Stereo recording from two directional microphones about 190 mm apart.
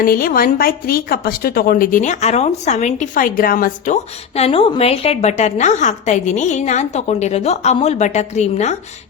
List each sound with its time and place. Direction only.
0.0 s speech: 50° left (ahead or behind)